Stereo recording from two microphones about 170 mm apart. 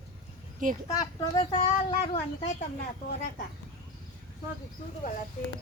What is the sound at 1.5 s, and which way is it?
Speech, 35° left (ahead or behind).